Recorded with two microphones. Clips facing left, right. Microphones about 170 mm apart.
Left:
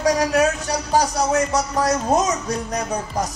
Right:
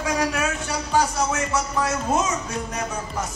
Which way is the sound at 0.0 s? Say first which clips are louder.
Left 6 dB; 40° left (ahead or behind).